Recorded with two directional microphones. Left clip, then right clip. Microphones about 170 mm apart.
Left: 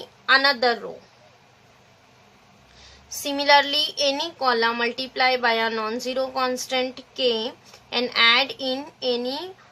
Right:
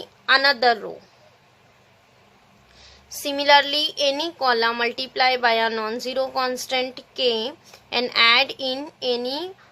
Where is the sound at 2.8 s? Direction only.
30° right (ahead or behind).